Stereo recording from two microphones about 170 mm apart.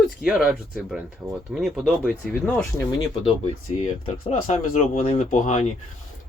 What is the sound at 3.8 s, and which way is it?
Speech, 35° left (ahead or behind).